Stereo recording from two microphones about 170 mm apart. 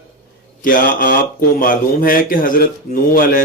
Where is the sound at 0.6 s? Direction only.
55° left (ahead or behind).